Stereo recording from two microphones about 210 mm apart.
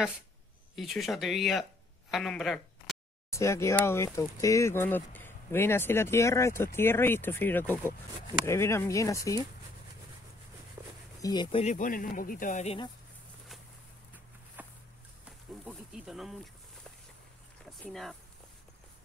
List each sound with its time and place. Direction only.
0.7 s speech: centre (ahead or behind)
3.3 s speech: 15° left (ahead or behind)
10.8 s a sound: 10° right (ahead or behind)
11.1 s speech: 20° left (ahead or behind)
11.6 s speech: 40° left (ahead or behind)
14.6 s walk: 10° right (ahead or behind)
15.7 s speech: centre (ahead or behind)
17.8 s speech: centre (ahead or behind)